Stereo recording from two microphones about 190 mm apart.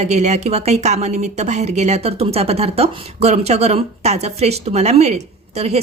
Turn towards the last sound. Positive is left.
turn(degrees=-35)  # may be behind; listen again after turning